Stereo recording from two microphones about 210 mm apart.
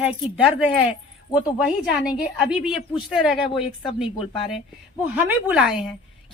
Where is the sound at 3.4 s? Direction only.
25° left (ahead or behind).